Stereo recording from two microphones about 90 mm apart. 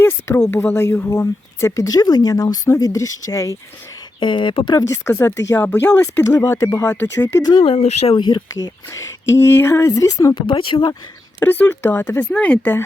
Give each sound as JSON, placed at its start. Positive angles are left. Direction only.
{"t": 0.0, "sound": "a sound", "side_deg": 25}
{"t": 0.5, "sound": "speech", "side_deg": 25}
{"t": 4.2, "sound": "speech", "side_deg": 65}
{"t": 4.8, "sound": "speech", "side_deg": 35}
{"t": 6.8, "sound": "speech", "side_deg": 20}
{"t": 7.6, "sound": "speech", "side_deg": 90}
{"t": 8.4, "sound": "speech", "side_deg": 35}
{"t": 10.3, "sound": "speech", "side_deg": 75}
{"t": 11.3, "sound": "speech", "side_deg": 20}
{"t": 12.3, "sound": "speech", "side_deg": 15}